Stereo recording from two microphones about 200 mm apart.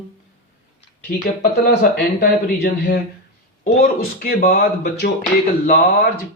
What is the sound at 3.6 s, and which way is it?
Speech, 45° left (ahead or behind).